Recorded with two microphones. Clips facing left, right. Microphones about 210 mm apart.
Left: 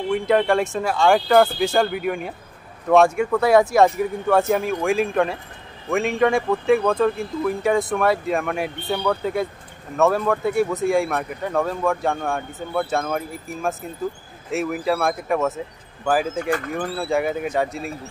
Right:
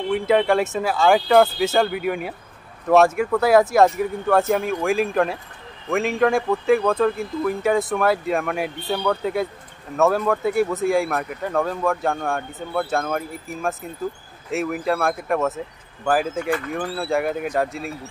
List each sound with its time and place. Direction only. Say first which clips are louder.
0.1 s speech: even; centre (ahead or behind)
16.3 s speech: even; 45° left (ahead or behind)
16.7 s speech: left 1 dB; centre (ahead or behind)